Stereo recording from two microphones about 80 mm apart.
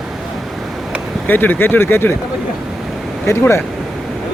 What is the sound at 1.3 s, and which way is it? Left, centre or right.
Speech, left.